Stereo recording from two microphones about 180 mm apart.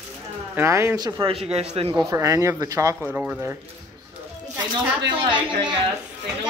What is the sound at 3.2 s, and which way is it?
Speech, 5° right (ahead or behind).